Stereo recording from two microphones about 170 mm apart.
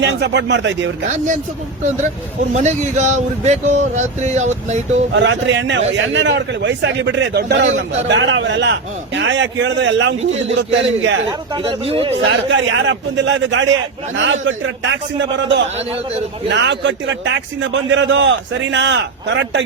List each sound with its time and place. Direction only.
0.0 s a man's voice: 90° right
2.5 s speech: 45° right (ahead or behind)
5.1 s a man's voice: 90° right
11.3 s speech: 30° right (ahead or behind)
12.2 s a man's voice: 90° right